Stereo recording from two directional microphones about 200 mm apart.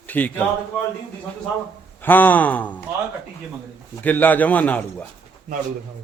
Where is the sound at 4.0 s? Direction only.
10° left (ahead or behind).